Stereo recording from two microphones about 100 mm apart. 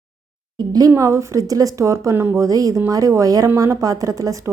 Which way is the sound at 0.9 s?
30° right (ahead or behind).